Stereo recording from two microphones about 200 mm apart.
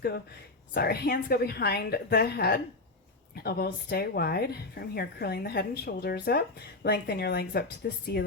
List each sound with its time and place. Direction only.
0.7 s speech: 50° left (ahead or behind)